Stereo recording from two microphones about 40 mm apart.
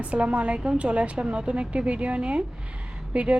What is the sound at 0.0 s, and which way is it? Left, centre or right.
A woman's voice, right.